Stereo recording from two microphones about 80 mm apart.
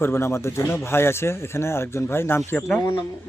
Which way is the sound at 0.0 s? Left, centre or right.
Left.